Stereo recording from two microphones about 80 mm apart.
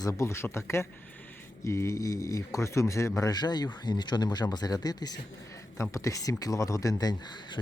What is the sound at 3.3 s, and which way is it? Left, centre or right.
Speech, left.